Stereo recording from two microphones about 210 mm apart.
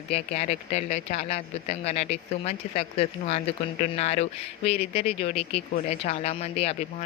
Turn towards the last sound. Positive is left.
turn(degrees=30)  # may be behind; listen again after turning